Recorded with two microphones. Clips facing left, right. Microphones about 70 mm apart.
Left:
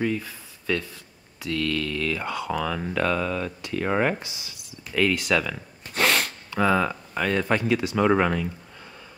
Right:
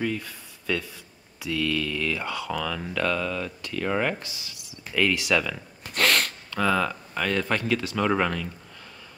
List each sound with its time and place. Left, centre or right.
0.0 s speech: centre
2.5 s speech: centre
4.2 s speech: centre
4.6 s a sound: centre
6.5 s speech: centre